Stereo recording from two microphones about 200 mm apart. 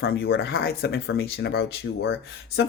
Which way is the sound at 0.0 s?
50° left (ahead or behind).